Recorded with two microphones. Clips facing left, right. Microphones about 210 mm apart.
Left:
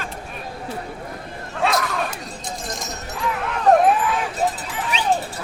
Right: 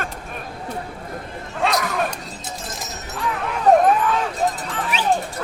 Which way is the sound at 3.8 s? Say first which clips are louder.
Right 1 dB; 10° left (ahead or behind).